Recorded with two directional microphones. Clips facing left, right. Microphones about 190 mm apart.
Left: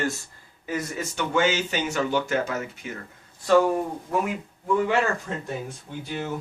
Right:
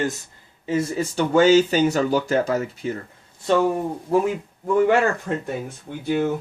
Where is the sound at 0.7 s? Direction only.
30° right (ahead or behind).